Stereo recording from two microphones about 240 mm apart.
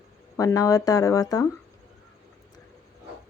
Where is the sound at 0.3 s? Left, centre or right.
Centre.